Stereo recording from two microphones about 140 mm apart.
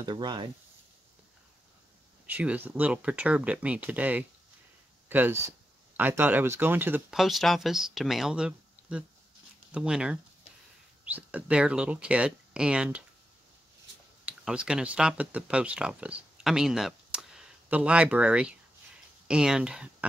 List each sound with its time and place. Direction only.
0.0 s speech: 30° right (ahead or behind)
2.2 s speech: 10° right (ahead or behind)
7.1 s speech: centre (ahead or behind)
14.2 s speech: 5° right (ahead or behind)